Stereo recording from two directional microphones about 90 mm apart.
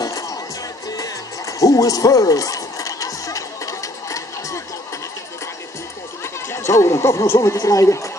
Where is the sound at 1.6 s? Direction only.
40° left (ahead or behind).